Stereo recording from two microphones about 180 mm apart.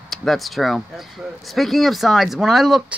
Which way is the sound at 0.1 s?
Centre (ahead or behind).